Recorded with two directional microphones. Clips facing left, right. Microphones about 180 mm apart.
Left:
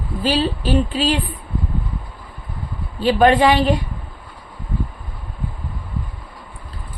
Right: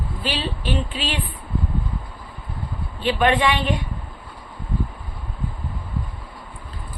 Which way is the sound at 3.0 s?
40° left (ahead or behind).